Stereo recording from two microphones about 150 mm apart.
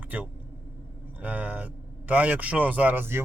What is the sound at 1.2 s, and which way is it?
Speech, 10° right (ahead or behind).